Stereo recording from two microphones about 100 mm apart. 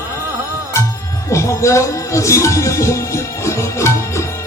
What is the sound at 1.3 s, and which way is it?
Speech, 30° left (ahead or behind).